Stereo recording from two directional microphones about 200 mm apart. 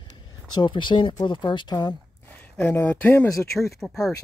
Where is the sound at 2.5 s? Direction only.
10° left (ahead or behind).